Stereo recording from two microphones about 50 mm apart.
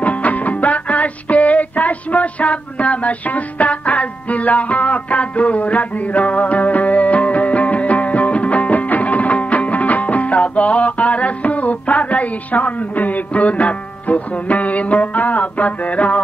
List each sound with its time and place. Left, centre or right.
0.0 s music: left